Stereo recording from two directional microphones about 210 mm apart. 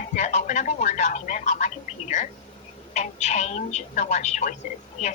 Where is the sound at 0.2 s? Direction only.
35° left (ahead or behind).